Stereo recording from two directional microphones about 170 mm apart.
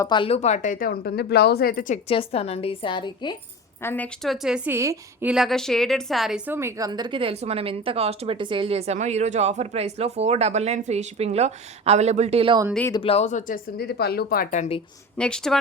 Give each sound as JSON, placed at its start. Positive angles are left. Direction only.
{"t": 0.0, "sound": "speech", "side_deg": 30}
{"t": 2.0, "sound": "a woman's voice", "side_deg": 35}
{"t": 3.8, "sound": "a woman's voice", "side_deg": 10}
{"t": 5.3, "sound": "a woman's voice", "side_deg": 0}
{"t": 12.9, "sound": "a woman's voice", "side_deg": 35}
{"t": 13.7, "sound": "speech", "side_deg": 70}
{"t": 14.5, "sound": "speech", "side_deg": 45}
{"t": 15.2, "sound": "a woman's voice", "side_deg": 5}